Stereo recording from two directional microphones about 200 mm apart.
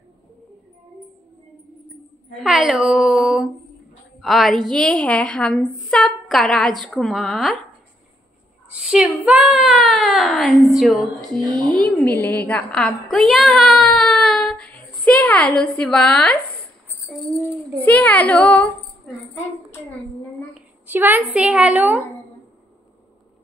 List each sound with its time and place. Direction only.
2.4 s a woman's voice: centre (ahead or behind)
8.6 s a woman's voice: 5° right (ahead or behind)
11.5 s speech: 20° right (ahead or behind)
11.8 s a woman's voice: 5° left (ahead or behind)
17.7 s a child's voice: 10° left (ahead or behind)
20.8 s a woman's voice: 10° right (ahead or behind)